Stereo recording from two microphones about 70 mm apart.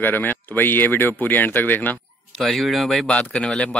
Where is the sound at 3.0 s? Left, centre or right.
Centre.